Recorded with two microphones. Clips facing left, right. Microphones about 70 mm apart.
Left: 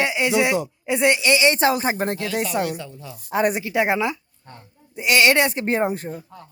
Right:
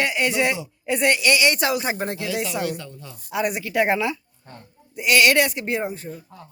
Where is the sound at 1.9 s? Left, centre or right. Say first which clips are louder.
Left 3 dB; left.